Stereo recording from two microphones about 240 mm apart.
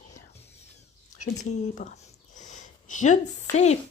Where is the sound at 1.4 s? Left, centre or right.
Left.